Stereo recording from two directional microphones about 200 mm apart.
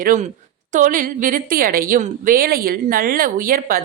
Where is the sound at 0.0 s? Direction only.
40° right (ahead or behind).